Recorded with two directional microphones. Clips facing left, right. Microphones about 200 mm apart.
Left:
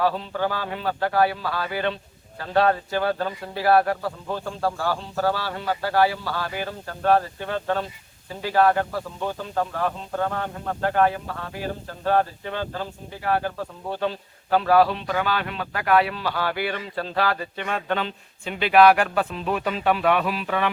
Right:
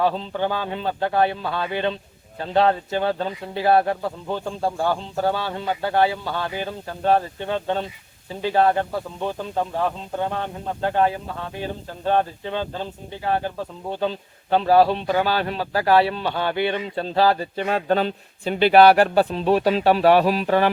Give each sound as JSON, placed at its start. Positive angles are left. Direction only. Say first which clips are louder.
{"t": 0.0, "sound": "a man's voice", "louder": "right 1 dB", "side_deg": -20}
{"t": 10.2, "sound": "a man's voice", "louder": "even", "side_deg": -25}
{"t": 14.5, "sound": "a man's voice", "louder": "right 2 dB", "side_deg": -25}